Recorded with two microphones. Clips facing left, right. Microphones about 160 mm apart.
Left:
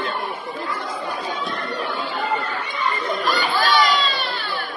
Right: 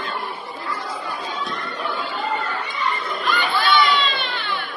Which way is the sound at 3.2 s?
40° left (ahead or behind).